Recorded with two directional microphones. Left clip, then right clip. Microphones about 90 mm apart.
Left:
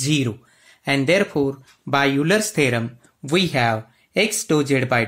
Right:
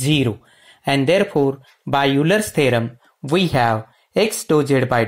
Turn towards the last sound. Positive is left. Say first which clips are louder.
# right 2 dB
turn(degrees=-25)  # may be behind; listen again after turning